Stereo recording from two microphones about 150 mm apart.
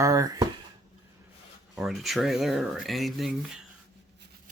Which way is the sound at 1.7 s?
Centre (ahead or behind).